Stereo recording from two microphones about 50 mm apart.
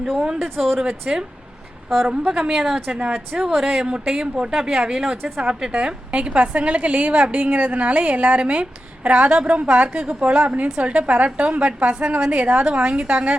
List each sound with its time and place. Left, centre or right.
0.0 s a woman's voice: centre
0.4 s speech: centre
0.9 s a woman's voice: centre
1.9 s speech: centre
2.1 s a woman's voice: centre
3.1 s a woman's voice: centre